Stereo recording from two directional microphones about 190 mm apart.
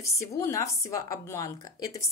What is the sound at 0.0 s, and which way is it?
A woman's voice, 15° left (ahead or behind).